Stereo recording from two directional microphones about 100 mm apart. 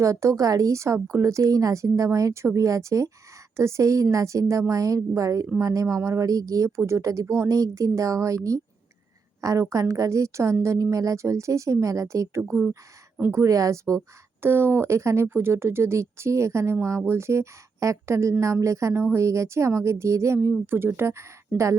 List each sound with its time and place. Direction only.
0.0 s a woman's voice: 30° right (ahead or behind)
9.4 s a woman's voice: 30° right (ahead or behind)
13.3 s a woman's voice: 35° right (ahead or behind)